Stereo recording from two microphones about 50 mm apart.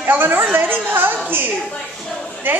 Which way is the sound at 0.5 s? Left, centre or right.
Right.